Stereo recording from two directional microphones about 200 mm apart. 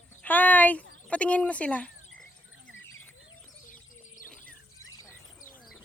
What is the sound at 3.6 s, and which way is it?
Bird, 40° left (ahead or behind).